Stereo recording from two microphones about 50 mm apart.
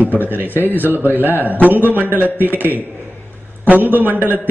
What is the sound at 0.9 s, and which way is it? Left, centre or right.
Speech, right.